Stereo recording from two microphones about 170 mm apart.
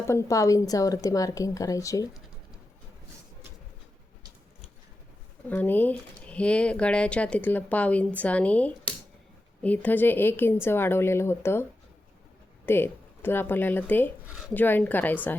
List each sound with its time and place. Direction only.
0.1 s a woman's voice: 15° left (ahead or behind)
5.5 s speech: 10° left (ahead or behind)
12.6 s speech: 15° left (ahead or behind)